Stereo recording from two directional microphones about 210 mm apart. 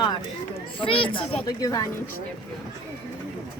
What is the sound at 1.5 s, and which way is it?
Speech, 15° left (ahead or behind).